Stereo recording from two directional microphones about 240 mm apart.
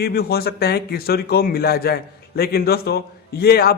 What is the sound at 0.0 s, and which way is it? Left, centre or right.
A man's voice, left.